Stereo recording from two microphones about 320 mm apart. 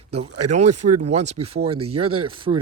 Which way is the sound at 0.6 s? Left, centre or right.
Right.